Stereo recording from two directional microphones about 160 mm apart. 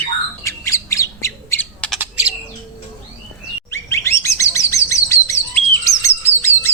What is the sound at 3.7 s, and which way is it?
Chirp, 15° left (ahead or behind).